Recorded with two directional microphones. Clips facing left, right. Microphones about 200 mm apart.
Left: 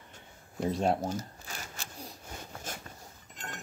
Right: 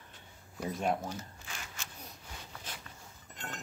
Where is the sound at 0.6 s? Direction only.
30° left (ahead or behind).